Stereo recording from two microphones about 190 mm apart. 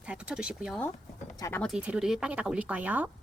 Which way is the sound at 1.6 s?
5° right (ahead or behind).